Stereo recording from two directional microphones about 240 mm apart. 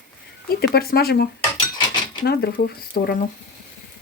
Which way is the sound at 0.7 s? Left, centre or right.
Left.